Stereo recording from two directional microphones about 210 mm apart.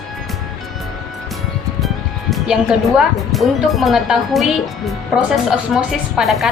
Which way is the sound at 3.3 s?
Centre (ahead or behind).